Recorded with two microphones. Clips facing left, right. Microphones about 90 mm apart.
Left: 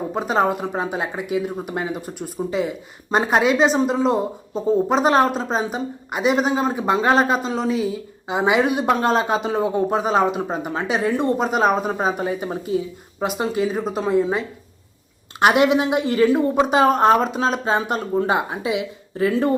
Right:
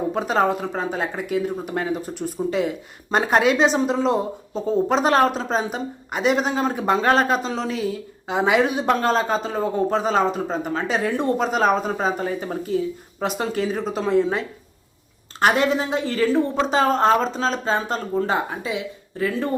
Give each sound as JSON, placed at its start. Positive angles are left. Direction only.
{"t": 0.2, "sound": "a woman's voice", "side_deg": 5}